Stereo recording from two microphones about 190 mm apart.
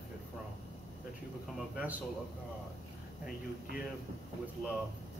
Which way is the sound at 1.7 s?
10° right (ahead or behind).